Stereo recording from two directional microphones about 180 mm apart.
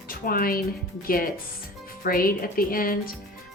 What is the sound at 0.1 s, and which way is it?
A woman's voice, 55° left (ahead or behind).